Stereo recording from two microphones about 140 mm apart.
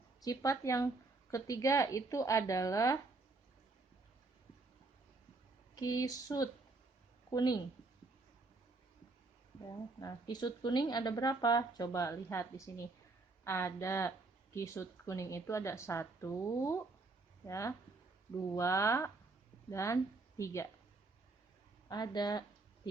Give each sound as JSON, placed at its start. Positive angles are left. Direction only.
{"t": 0.3, "sound": "speech", "side_deg": 25}
{"t": 5.7, "sound": "a woman's voice", "side_deg": 25}
{"t": 9.6, "sound": "speech", "side_deg": 25}
{"t": 21.8, "sound": "speech", "side_deg": 30}